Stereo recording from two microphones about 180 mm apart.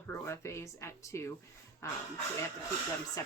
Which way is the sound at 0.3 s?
15° left (ahead or behind).